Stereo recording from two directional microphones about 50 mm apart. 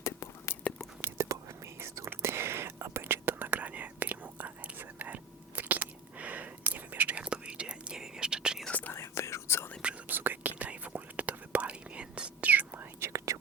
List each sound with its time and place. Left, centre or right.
0.0 s whispering: left
1.0 s whispering: right
7.2 s whispering: right
8.9 s whispering: left
10.1 s whispering: right
12.5 s whispering: right
13.1 s whispering: right